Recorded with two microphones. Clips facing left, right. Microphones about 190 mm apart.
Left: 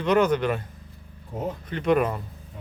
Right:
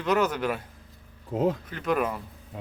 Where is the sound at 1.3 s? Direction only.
90° right.